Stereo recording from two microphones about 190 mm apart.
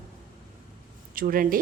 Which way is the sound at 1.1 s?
45° right (ahead or behind).